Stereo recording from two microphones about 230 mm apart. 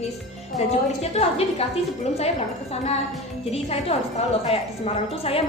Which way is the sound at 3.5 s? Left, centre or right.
Left.